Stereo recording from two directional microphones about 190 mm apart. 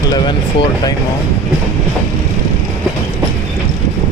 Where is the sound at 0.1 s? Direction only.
25° left (ahead or behind).